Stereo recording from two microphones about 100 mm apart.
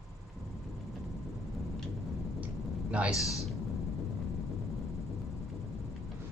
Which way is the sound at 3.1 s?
30° left (ahead or behind).